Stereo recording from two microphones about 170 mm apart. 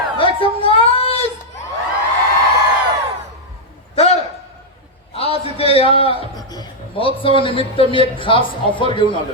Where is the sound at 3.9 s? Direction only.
35° left (ahead or behind).